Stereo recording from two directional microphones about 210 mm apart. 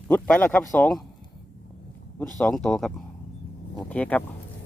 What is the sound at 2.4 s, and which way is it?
Speech, 5° left (ahead or behind).